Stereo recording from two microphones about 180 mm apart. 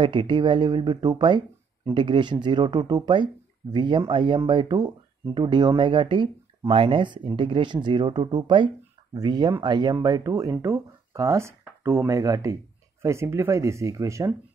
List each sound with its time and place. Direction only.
0.0 s speech: 25° right (ahead or behind)